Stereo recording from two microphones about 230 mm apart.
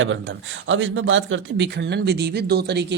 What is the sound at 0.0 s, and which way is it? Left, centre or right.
Speech, right.